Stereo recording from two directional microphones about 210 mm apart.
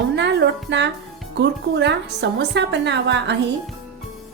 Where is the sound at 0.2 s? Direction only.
55° right (ahead or behind).